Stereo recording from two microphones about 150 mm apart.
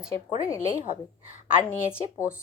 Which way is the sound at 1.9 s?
5° right (ahead or behind).